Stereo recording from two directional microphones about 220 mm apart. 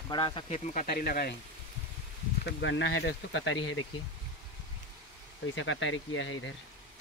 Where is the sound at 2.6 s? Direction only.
55° left (ahead or behind).